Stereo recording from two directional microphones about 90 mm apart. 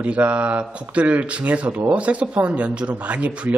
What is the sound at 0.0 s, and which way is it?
Speech, 15° right (ahead or behind).